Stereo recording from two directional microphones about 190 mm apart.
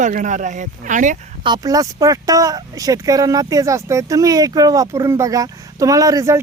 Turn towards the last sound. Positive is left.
turn(degrees=-15)  # may be behind; listen again after turning